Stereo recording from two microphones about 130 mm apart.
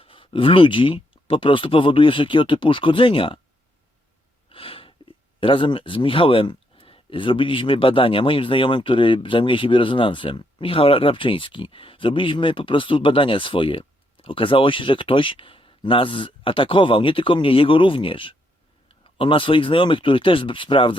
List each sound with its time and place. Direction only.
0.0 s speech: 45° left (ahead or behind)
4.5 s speech: 45° left (ahead or behind)